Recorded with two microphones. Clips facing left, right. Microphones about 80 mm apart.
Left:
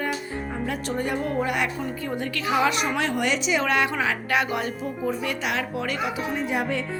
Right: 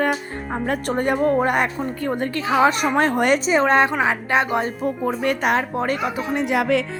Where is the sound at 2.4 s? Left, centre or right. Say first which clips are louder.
Right 5 dB; right.